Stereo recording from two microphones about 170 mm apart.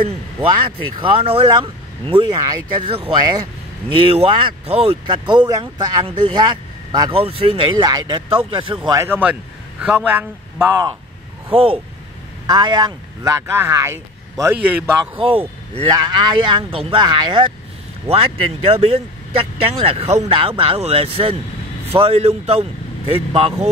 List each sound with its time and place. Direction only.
0.9 s speech: 30° right (ahead or behind)
8.9 s a man's voice: 15° right (ahead or behind)
11.5 s speech: 35° right (ahead or behind); by 14.9 s 10° right (ahead or behind)
15.1 s speech: 30° right (ahead or behind)